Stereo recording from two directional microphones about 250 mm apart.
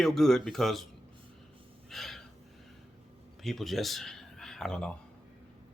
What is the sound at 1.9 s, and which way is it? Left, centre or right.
Gasp, centre.